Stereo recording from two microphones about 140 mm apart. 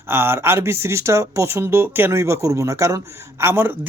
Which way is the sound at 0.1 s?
15° right (ahead or behind).